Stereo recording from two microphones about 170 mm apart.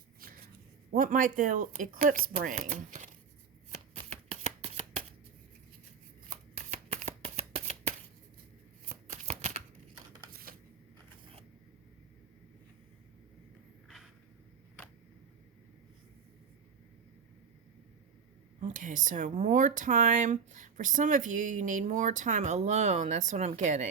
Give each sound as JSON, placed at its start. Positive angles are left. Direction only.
{"t": 0.2, "sound": "shuffling cards", "side_deg": -65}
{"t": 0.9, "sound": "speech", "side_deg": -50}
{"t": 4.1, "sound": "shuffling cards", "side_deg": -40}
{"t": 6.2, "sound": "shuffling cards", "side_deg": -40}
{"t": 8.9, "sound": "shuffling cards", "side_deg": -40}
{"t": 13.8, "sound": "a sound", "side_deg": 0}
{"t": 18.6, "sound": "speech", "side_deg": -50}